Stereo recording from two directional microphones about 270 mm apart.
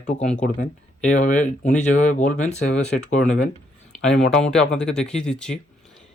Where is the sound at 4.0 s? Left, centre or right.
Centre.